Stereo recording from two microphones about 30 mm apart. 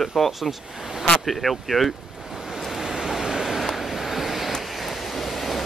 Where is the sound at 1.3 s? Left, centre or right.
Centre.